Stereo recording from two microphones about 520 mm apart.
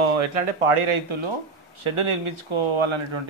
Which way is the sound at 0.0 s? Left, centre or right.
Right.